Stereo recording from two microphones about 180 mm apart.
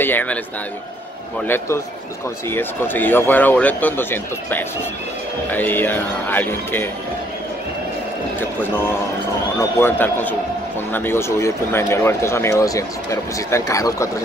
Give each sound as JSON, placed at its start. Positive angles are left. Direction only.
{"t": 0.0, "sound": "speech", "side_deg": 10}
{"t": 2.5, "sound": "speech", "side_deg": 10}
{"t": 8.4, "sound": "speech", "side_deg": 10}